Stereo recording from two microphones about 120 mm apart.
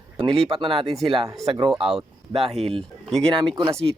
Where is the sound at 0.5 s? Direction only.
35° right (ahead or behind).